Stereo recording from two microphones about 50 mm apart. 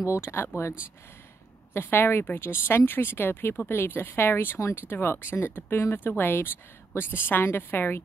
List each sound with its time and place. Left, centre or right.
0.0 s speech: left
1.7 s a woman's voice: left